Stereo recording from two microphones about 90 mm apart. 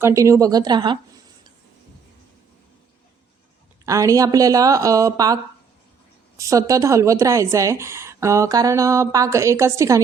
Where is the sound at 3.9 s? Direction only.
40° right (ahead or behind).